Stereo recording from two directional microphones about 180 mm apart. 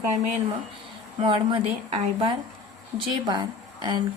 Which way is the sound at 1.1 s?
30° right (ahead or behind).